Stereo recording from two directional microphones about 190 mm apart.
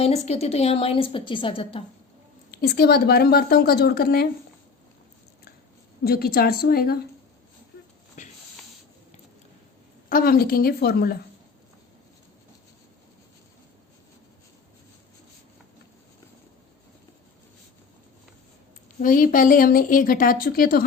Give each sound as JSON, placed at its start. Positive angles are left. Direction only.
{"t": 0.0, "sound": "a woman's voice", "side_deg": 35}
{"t": 2.5, "sound": "a woman's voice", "side_deg": 55}
{"t": 6.1, "sound": "a woman's voice", "side_deg": 55}
{"t": 8.2, "sound": "a sound", "side_deg": 40}
{"t": 10.1, "sound": "a woman's voice", "side_deg": 50}
{"t": 19.0, "sound": "a woman's voice", "side_deg": 45}